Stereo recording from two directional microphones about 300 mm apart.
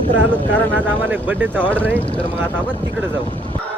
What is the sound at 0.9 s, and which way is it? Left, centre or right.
Speech, centre.